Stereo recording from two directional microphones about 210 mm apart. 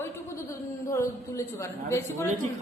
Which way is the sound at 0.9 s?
15° left (ahead or behind).